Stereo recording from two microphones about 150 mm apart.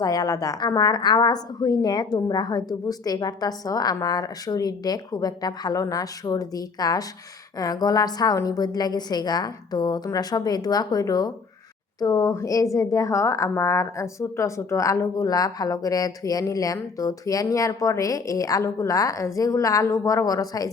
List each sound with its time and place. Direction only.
0.0 s a woman's voice: 25° left (ahead or behind)